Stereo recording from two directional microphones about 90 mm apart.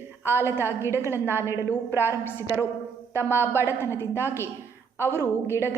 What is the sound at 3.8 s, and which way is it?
Speech, 30° left (ahead or behind).